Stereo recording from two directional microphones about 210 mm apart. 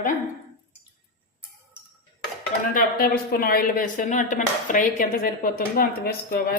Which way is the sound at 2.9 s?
45° left (ahead or behind).